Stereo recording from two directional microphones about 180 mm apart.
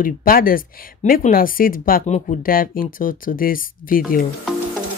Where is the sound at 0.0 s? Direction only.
50° left (ahead or behind).